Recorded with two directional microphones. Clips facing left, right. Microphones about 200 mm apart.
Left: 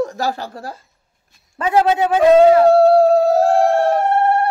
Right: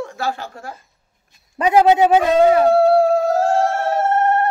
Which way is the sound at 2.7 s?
35° left (ahead or behind).